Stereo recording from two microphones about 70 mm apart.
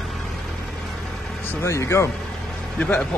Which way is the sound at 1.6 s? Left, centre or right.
Left.